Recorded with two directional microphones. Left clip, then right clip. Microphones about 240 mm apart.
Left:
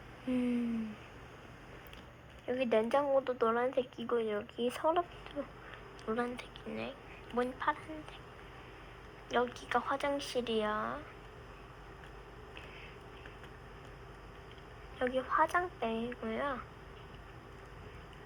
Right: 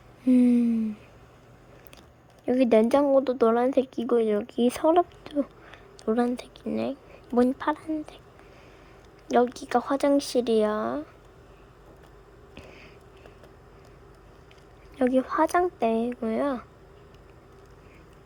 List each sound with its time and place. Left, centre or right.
0.3 s speech: right
2.5 s speech: right
9.2 s speech: right
14.9 s speech: right